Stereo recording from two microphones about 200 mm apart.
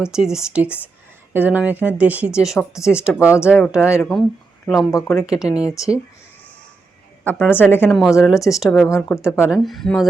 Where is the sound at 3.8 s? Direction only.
15° left (ahead or behind).